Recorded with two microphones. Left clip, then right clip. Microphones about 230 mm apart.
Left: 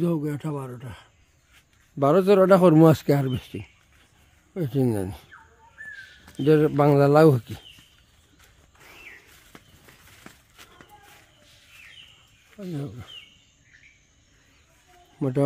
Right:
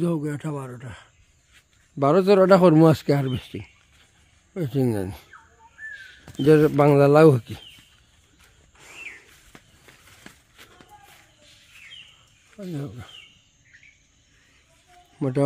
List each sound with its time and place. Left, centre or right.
0.0 s speech: centre
6.3 s speech: centre
8.7 s a sound: centre
12.5 s speech: centre
15.1 s a man's voice: centre